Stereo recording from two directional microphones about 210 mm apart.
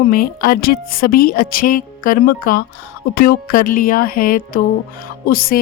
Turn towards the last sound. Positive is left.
turn(degrees=45)  # may be behind; listen again after turning